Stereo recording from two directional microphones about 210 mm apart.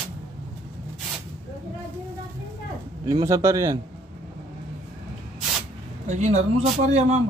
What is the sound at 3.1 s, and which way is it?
Speech, 15° right (ahead or behind).